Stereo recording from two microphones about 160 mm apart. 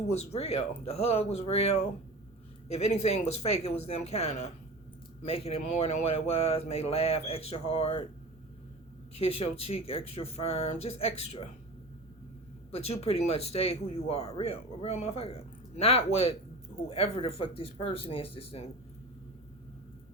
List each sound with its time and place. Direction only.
0.1 s speech: 40° left (ahead or behind)
9.1 s speech: 35° left (ahead or behind)
12.7 s speech: 40° left (ahead or behind)